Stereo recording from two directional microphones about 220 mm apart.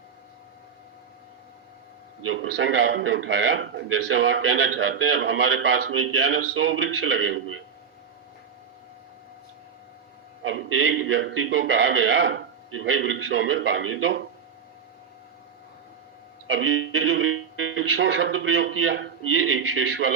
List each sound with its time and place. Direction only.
2.2 s a man's voice: 65° right (ahead or behind)
10.4 s a man's voice: 65° right (ahead or behind)
16.6 s a man's voice: 65° right (ahead or behind)